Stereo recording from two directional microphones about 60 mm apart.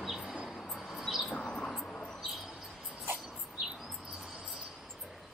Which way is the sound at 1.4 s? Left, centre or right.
Centre.